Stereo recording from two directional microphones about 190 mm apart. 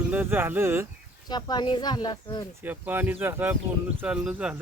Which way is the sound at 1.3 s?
20° left (ahead or behind).